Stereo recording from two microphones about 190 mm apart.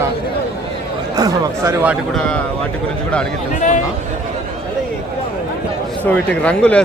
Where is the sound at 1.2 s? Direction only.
15° right (ahead or behind).